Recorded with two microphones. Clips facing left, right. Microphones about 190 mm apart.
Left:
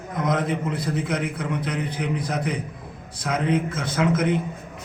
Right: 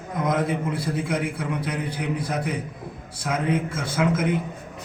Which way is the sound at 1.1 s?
10° right (ahead or behind).